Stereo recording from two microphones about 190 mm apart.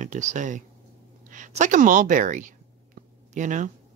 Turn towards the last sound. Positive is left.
turn(degrees=-40)  # may be behind; listen again after turning